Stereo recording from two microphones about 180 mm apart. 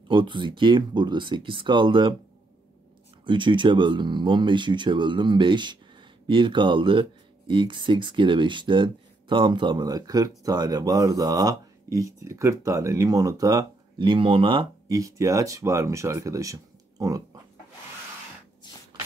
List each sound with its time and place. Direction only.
0.1 s speech: 25° right (ahead or behind)
3.3 s speech: 25° right (ahead or behind)
17.0 s pig: 20° right (ahead or behind)